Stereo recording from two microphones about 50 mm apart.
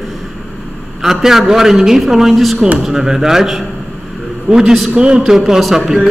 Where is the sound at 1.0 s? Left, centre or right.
Centre.